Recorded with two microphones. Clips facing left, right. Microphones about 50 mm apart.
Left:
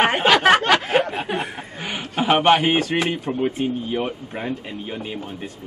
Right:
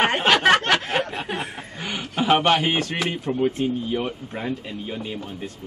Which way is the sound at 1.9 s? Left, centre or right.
Left.